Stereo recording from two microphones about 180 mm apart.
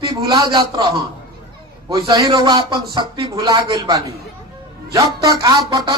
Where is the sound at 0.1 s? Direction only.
20° right (ahead or behind).